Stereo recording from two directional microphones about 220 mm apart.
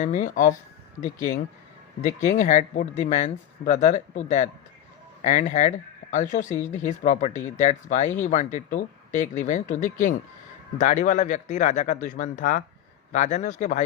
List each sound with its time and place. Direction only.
0.0 s speech: 35° left (ahead or behind)